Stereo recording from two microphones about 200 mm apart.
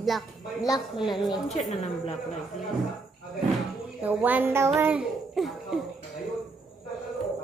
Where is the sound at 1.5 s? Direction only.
35° left (ahead or behind).